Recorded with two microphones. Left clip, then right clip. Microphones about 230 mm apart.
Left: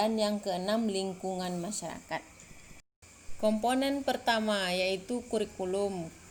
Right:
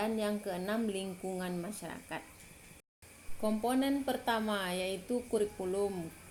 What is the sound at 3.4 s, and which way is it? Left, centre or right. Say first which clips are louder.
Speech: left 4 dB; left.